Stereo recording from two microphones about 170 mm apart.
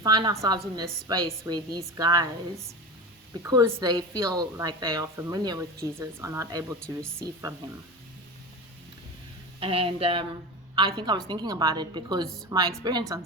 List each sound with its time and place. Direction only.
0.0 s a woman's voice: 25° right (ahead or behind)
9.6 s a woman's voice: 30° right (ahead or behind)